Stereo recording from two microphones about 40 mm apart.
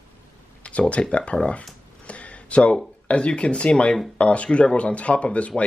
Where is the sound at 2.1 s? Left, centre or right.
Left.